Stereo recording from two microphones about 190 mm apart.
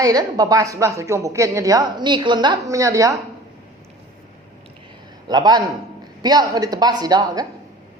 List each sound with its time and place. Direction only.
0.0 s a woman's voice: 20° right (ahead or behind)
5.3 s speech: 20° right (ahead or behind)